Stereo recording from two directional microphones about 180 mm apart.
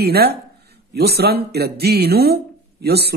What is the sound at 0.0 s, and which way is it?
Speech, 60° right (ahead or behind).